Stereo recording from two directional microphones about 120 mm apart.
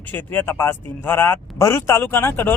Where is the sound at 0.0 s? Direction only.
15° left (ahead or behind).